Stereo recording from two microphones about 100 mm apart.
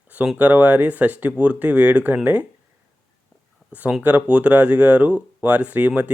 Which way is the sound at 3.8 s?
10° right (ahead or behind).